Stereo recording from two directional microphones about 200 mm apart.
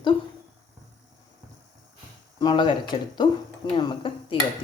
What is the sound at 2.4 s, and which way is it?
Speech, 20° left (ahead or behind).